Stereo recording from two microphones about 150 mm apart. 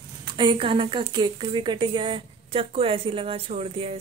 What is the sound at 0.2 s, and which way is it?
A woman's voice, 30° right (ahead or behind).